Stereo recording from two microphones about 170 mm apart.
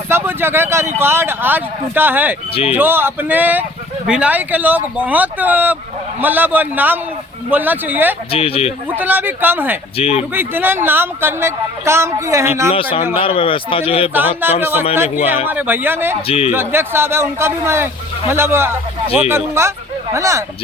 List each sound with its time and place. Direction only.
0.1 s speech: 15° right (ahead or behind)
8.3 s a man's voice: 35° left (ahead or behind)
9.0 s speech: 10° right (ahead or behind)
10.0 s a man's voice: 35° left (ahead or behind)
10.3 s speech: 10° right (ahead or behind)
12.7 s a man's voice: 30° left (ahead or behind)
14.1 s speech: 10° right (ahead or behind)
16.2 s a man's voice: 35° left (ahead or behind)
16.5 s speech: 15° right (ahead or behind)